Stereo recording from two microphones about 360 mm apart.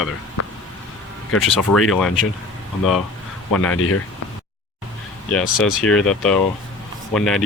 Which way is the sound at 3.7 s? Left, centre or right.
Left.